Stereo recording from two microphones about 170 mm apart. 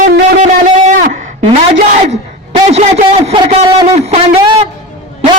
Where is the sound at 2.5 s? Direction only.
40° right (ahead or behind).